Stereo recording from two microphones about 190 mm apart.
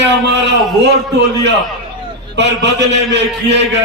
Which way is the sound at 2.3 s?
65° right (ahead or behind).